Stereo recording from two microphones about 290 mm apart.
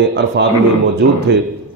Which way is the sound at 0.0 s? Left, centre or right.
Right.